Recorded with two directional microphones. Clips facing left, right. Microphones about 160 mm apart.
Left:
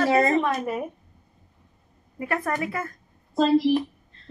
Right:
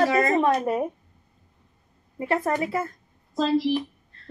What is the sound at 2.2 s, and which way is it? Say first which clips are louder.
Speech: right 3 dB; 25° right (ahead or behind).